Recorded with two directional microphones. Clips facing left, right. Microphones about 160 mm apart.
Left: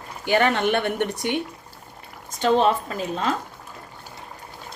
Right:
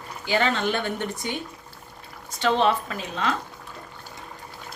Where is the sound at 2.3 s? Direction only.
45° left (ahead or behind).